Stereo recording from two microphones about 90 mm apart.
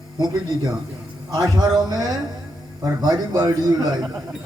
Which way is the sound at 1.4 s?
45° right (ahead or behind).